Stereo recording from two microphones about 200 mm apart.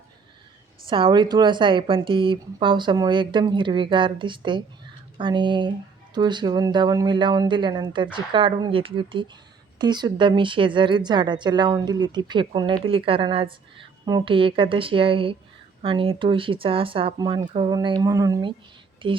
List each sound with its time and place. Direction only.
0.9 s a woman's voice: 25° right (ahead or behind)